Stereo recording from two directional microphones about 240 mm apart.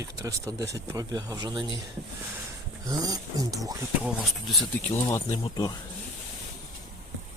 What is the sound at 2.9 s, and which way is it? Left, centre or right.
Speech, centre.